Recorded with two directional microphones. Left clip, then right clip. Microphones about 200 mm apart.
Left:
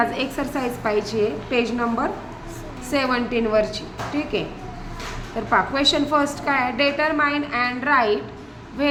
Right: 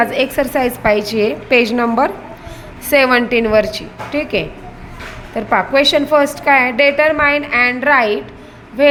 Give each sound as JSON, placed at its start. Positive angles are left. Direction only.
{"t": 0.0, "sound": "a woman's voice", "side_deg": -35}
{"t": 5.5, "sound": "a woman's voice", "side_deg": -35}